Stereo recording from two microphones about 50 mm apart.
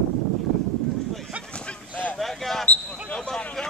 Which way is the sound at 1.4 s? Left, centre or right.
Left.